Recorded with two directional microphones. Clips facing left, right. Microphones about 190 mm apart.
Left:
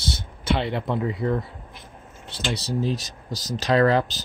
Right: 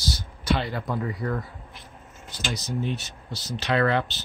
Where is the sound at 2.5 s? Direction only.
35° left (ahead or behind).